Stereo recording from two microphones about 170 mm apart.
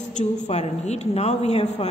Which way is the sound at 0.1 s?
40° left (ahead or behind).